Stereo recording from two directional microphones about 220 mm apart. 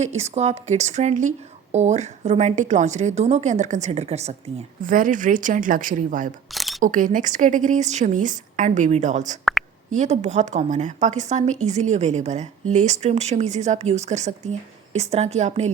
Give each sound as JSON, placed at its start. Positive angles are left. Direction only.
{"t": 0.0, "sound": "speech", "side_deg": -30}
{"t": 6.5, "sound": "camera", "side_deg": 0}
{"t": 6.8, "sound": "speech", "side_deg": -35}
{"t": 9.4, "sound": "a sound", "side_deg": 0}
{"t": 9.9, "sound": "a woman's voice", "side_deg": -30}